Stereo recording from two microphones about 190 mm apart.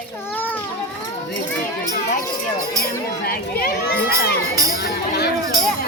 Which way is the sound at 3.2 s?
55° left (ahead or behind).